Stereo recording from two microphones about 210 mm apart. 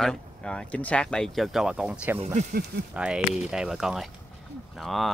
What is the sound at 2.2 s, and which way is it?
Speech, 35° right (ahead or behind).